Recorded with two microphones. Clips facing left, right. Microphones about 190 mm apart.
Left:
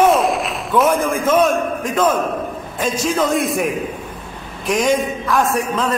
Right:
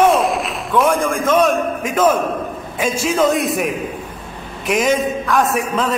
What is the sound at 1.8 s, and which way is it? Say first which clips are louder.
A man's voice: right 3 dB; 5° right (ahead or behind).